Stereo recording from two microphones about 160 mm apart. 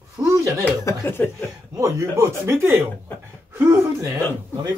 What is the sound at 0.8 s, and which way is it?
Speech, 15° left (ahead or behind).